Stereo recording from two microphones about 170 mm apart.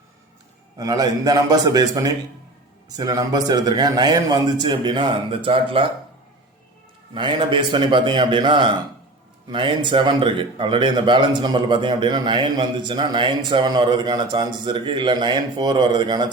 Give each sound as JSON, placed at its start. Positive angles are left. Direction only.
{"t": 0.8, "sound": "speech", "side_deg": -20}
{"t": 7.1, "sound": "speech", "side_deg": -30}